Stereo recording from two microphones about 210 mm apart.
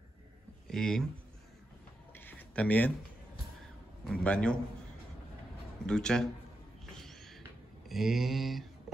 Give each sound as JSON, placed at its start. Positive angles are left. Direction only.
{"t": 0.7, "sound": "speech", "side_deg": 5}
{"t": 2.1, "sound": "a sound", "side_deg": 10}
{"t": 4.1, "sound": "mantra", "side_deg": 5}
{"t": 5.9, "sound": "mantra", "side_deg": 5}
{"t": 7.0, "sound": "a sound", "side_deg": 0}
{"t": 7.9, "sound": "mantra", "side_deg": 0}